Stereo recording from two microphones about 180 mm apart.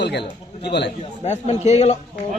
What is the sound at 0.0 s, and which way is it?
Speech, 70° left (ahead or behind).